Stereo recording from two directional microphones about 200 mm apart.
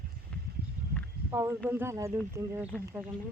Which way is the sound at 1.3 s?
15° right (ahead or behind).